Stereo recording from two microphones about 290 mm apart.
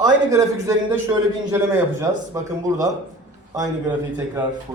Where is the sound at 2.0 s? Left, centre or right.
Centre.